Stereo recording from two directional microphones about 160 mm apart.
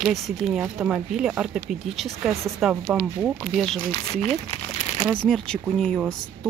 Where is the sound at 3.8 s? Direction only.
40° left (ahead or behind).